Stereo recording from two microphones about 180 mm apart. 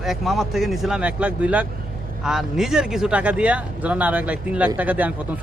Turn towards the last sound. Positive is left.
turn(degrees=-10)  # may be behind; listen again after turning